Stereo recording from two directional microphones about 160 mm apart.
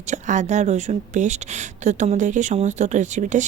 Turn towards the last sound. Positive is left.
turn(degrees=-50)  # may be behind; listen again after turning